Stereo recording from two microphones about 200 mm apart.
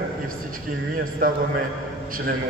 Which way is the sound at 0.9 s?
45° right (ahead or behind).